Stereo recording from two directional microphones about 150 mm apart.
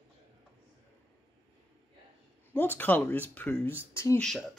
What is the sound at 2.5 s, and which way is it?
Speech, 10° left (ahead or behind).